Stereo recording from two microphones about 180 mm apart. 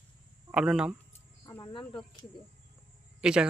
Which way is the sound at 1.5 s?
15° left (ahead or behind).